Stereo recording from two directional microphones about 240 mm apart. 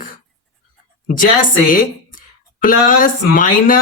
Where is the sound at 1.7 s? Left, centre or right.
Left.